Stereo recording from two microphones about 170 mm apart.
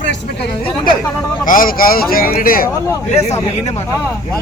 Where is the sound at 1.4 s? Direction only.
55° left (ahead or behind).